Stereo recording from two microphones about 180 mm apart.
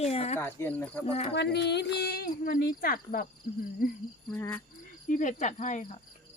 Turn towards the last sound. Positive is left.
turn(degrees=40)  # may be behind; listen again after turning